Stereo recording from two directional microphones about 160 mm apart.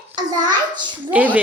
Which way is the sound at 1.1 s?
10° right (ahead or behind).